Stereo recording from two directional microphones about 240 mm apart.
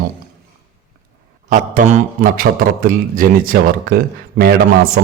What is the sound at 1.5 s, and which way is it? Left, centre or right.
A man's voice, right.